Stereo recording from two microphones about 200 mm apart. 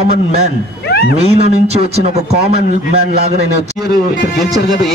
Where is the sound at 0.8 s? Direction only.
55° left (ahead or behind).